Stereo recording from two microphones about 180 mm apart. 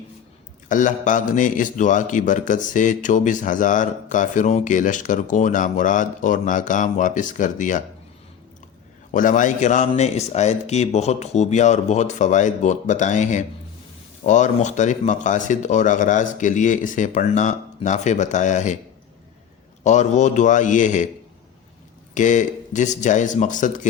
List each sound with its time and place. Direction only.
0.7 s a man's voice: 45° left (ahead or behind)
9.1 s a man's voice: 45° left (ahead or behind)
19.8 s a man's voice: 40° left (ahead or behind)
22.1 s a man's voice: 45° left (ahead or behind)